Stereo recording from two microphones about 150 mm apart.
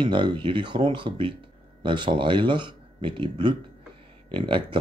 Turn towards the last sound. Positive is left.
turn(degrees=-35)  # may be behind; listen again after turning